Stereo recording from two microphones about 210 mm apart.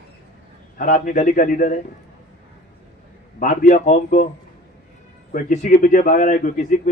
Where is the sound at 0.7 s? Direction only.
40° left (ahead or behind).